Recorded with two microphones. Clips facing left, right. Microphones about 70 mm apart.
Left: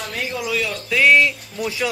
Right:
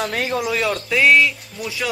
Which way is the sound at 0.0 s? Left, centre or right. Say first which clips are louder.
Right 5 dB; right.